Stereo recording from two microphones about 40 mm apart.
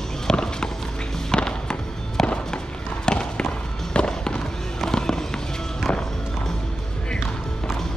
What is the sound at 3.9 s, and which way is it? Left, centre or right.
Fireworks, left.